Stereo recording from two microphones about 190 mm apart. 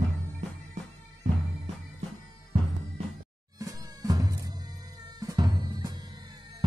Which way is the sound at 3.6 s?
20° right (ahead or behind).